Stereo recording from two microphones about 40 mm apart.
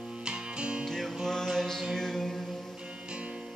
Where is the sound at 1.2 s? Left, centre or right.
Centre.